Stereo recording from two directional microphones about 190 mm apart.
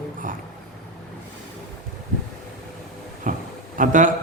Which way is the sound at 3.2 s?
45° right (ahead or behind).